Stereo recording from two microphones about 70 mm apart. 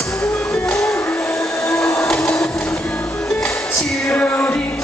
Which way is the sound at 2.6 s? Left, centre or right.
Centre.